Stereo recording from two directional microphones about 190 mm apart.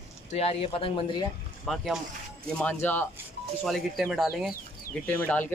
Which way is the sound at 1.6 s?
Centre (ahead or behind).